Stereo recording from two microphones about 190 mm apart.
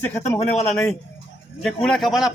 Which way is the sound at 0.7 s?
10° left (ahead or behind).